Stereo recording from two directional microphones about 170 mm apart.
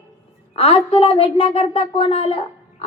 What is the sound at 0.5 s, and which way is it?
Speech, 35° left (ahead or behind).